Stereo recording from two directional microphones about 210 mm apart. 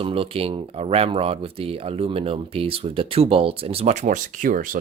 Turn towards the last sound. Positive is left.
turn(degrees=-40)  # may be behind; listen again after turning